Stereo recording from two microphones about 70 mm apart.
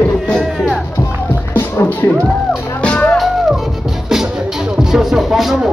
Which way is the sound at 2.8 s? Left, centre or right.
Centre.